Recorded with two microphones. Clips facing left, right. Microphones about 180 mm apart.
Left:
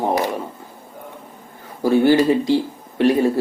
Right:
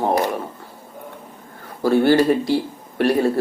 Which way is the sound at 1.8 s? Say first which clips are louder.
Left 1 dB; 15° left (ahead or behind).